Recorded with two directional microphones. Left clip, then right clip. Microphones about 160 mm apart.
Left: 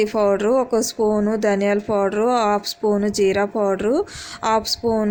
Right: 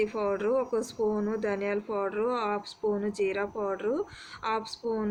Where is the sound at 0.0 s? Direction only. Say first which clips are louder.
Left 11 dB; 60° left (ahead or behind).